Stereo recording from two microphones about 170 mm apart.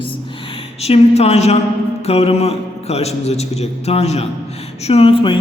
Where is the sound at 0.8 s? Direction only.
40° left (ahead or behind).